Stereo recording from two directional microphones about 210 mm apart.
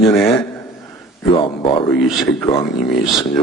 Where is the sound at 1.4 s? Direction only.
25° left (ahead or behind).